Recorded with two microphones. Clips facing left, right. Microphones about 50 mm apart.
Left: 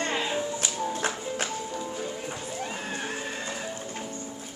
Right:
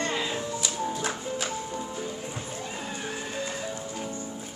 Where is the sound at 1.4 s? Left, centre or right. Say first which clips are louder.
Even; right.